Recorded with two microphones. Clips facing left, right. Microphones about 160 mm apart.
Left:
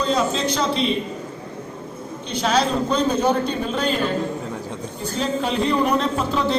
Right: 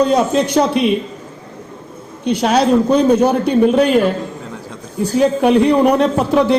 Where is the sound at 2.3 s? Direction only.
60° right (ahead or behind).